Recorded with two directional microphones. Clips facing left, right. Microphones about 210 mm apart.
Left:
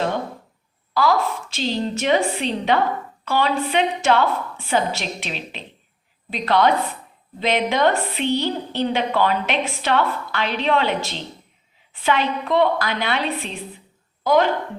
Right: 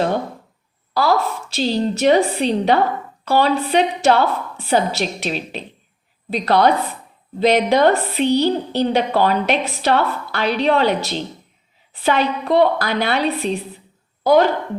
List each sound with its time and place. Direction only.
0.9 s a woman's voice: 35° right (ahead or behind)